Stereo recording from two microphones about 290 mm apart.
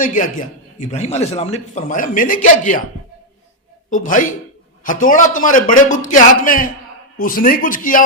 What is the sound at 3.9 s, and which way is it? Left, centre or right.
A man's voice, left.